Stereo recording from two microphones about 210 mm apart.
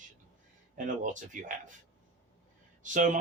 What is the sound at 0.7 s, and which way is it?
Speech, 40° right (ahead or behind).